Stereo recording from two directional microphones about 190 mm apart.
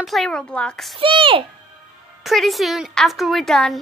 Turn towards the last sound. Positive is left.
turn(degrees=0)  # may be behind; listen again after turning